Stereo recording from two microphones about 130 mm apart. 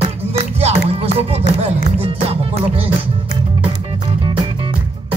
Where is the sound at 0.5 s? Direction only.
50° right (ahead or behind).